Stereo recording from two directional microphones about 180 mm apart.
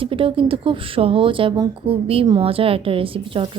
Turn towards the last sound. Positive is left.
turn(degrees=-30)  # may be behind; listen again after turning